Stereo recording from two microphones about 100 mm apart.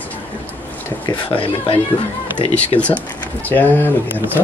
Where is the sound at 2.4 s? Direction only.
75° left (ahead or behind).